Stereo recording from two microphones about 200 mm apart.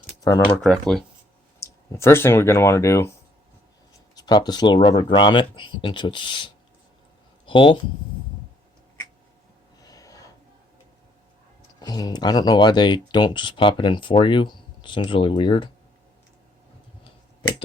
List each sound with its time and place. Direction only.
0.2 s speech: 20° left (ahead or behind)
0.4 s speech: 5° left (ahead or behind)
1.5 s speech: 15° left (ahead or behind)
4.1 s speech: 20° left (ahead or behind)
9.8 s snort: 20° left (ahead or behind)
11.8 s speech: 20° left (ahead or behind)